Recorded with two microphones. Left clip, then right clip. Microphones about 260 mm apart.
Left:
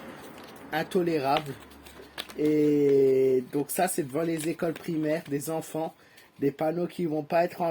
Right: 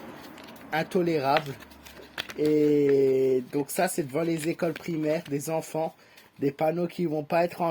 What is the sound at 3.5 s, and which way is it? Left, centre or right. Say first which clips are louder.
Speech: even; right.